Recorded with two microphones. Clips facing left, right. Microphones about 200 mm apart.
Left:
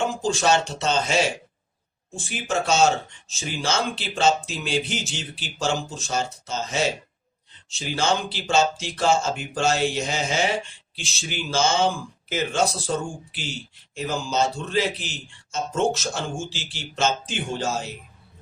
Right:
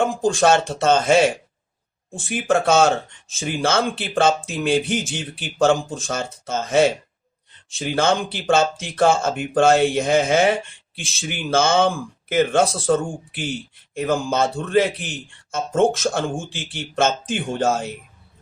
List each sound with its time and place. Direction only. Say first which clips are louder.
0.2 s speech: right 5 dB; 55° right (ahead or behind)